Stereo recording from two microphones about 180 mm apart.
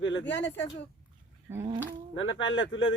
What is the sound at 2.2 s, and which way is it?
Speech, 90° left.